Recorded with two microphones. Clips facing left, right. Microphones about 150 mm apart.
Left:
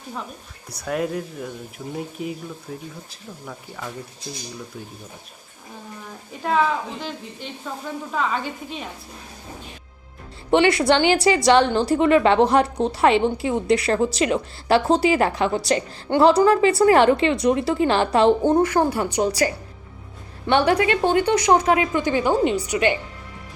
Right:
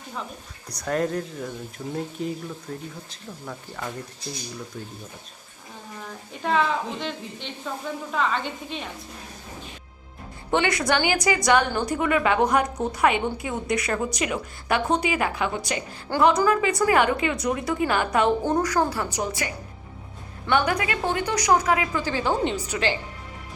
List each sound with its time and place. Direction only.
0.7 s speech: 5° left (ahead or behind)
6.4 s speech: 5° left (ahead or behind)
10.5 s a woman's voice: 25° left (ahead or behind)
16.0 s a woman's voice: 25° left (ahead or behind)
20.5 s a woman's voice: 30° left (ahead or behind); by 22.8 s 10° left (ahead or behind)